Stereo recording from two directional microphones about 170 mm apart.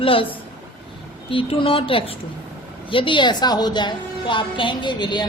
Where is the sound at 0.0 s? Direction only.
30° left (ahead or behind).